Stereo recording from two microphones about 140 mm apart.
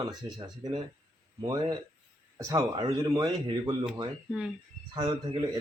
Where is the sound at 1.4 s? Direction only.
30° right (ahead or behind).